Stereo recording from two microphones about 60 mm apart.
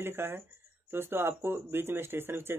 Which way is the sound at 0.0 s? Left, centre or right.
Right.